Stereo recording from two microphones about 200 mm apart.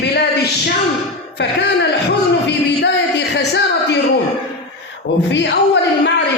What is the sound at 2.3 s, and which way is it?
Music, 60° left (ahead or behind).